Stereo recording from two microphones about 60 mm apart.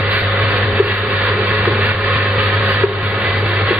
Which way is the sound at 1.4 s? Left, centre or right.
Right.